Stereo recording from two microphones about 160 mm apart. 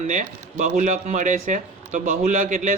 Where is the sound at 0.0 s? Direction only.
50° right (ahead or behind).